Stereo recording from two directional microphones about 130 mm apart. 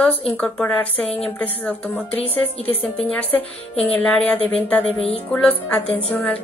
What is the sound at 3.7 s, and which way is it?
A woman's voice, 10° left (ahead or behind).